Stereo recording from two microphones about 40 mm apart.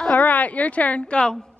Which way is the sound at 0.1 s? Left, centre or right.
Left.